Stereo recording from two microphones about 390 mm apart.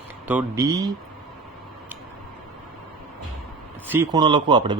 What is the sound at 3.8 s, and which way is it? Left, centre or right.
Speech, centre.